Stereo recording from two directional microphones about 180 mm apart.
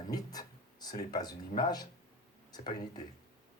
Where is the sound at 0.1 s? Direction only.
20° left (ahead or behind).